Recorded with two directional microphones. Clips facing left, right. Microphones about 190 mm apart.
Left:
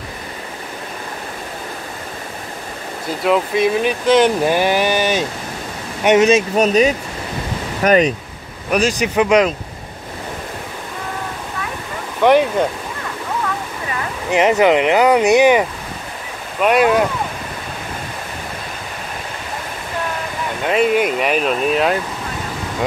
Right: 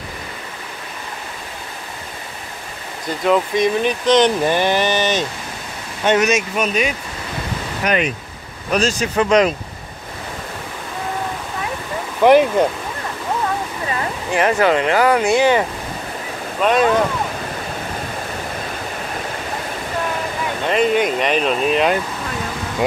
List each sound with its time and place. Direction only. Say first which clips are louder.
3.3 s speech: even; 5° left (ahead or behind)
6.0 s speech: left 4 dB; 25° left (ahead or behind)
8.6 s speech: left 2 dB; 15° left (ahead or behind)
12.2 s speech: right 1 dB; 5° right (ahead or behind)
14.3 s speech: left 3 dB; 20° left (ahead or behind)
16.6 s speech: left 2 dB; 10° left (ahead or behind)
20.6 s speech: left 1 dB; 5° left (ahead or behind)